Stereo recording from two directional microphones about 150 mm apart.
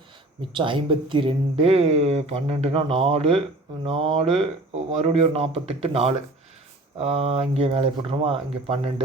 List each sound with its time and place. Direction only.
0.5 s speech: 35° right (ahead or behind)